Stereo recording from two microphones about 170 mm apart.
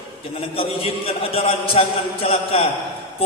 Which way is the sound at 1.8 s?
35° left (ahead or behind).